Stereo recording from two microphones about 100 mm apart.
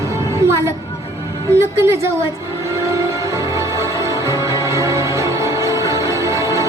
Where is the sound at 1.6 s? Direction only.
25° right (ahead or behind).